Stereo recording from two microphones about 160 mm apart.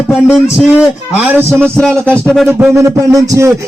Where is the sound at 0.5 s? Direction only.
5° right (ahead or behind).